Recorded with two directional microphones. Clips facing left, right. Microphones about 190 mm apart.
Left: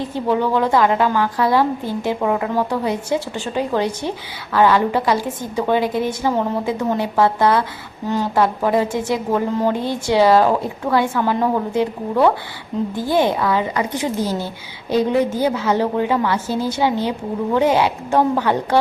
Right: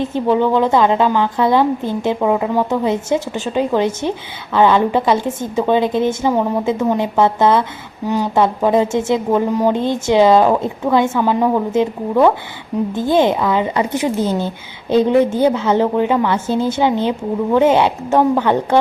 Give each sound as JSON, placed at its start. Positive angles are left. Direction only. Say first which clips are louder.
{"t": 0.0, "sound": "a woman's voice", "louder": "right 4 dB", "side_deg": -20}
{"t": 12.9, "sound": "a woman's voice", "louder": "right 4 dB", "side_deg": -20}